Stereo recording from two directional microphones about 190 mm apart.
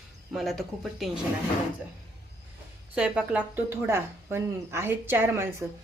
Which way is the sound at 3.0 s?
5° right (ahead or behind).